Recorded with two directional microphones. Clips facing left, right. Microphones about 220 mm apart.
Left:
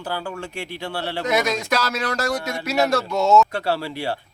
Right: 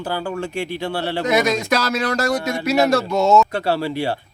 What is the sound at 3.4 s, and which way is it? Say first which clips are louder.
Speech: right 1 dB; 20° right (ahead or behind).